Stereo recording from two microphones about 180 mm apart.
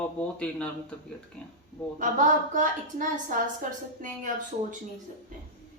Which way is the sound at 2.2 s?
45° right (ahead or behind).